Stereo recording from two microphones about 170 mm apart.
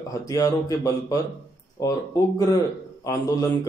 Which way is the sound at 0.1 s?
20° left (ahead or behind).